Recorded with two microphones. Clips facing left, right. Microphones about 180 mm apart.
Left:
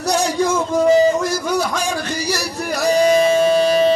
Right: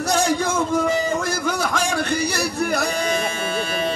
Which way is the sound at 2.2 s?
55° right (ahead or behind).